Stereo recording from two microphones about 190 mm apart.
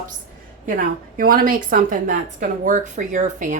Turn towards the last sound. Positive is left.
turn(degrees=-40)  # may be behind; listen again after turning